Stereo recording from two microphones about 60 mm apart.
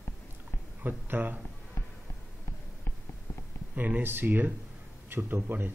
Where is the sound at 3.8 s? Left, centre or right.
Right.